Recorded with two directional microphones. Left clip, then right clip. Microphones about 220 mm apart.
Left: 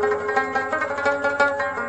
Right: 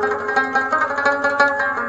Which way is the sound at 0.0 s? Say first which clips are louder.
Right 2 dB; 45° right (ahead or behind).